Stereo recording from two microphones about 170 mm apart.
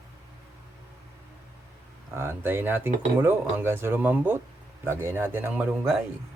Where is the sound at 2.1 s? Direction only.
15° right (ahead or behind).